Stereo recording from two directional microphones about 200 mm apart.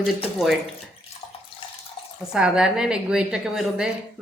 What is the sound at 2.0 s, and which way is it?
Water tap, 25° left (ahead or behind).